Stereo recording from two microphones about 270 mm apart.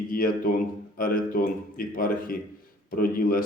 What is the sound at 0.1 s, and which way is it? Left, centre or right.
A man's voice, left.